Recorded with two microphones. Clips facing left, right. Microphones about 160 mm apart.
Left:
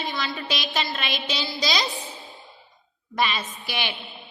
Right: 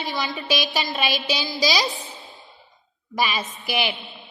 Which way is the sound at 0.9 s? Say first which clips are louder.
Right 5 dB; centre (ahead or behind).